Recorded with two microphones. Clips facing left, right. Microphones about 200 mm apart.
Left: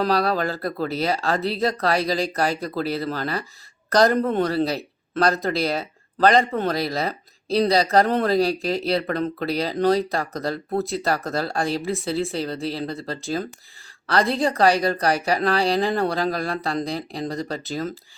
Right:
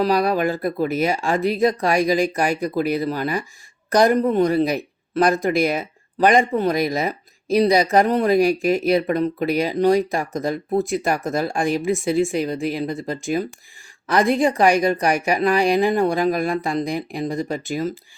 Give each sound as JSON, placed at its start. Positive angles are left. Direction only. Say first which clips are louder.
{"t": 0.0, "sound": "speech", "louder": "right 3 dB", "side_deg": -15}